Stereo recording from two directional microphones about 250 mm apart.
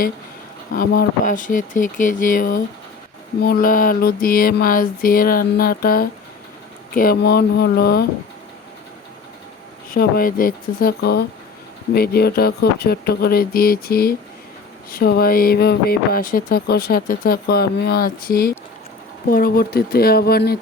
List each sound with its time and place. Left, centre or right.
0.7 s speech: left
9.9 s speech: left